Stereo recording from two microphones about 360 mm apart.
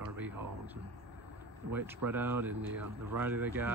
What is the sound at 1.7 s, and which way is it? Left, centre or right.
Speech, centre.